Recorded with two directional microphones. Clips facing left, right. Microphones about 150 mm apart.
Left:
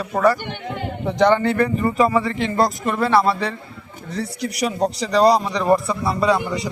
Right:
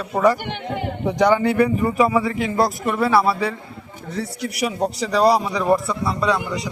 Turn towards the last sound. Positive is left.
turn(degrees=5)  # may be behind; listen again after turning